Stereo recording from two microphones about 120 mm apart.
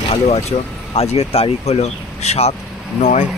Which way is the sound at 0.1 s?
60° left (ahead or behind).